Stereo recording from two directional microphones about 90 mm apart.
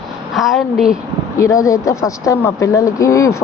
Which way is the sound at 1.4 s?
35° left (ahead or behind).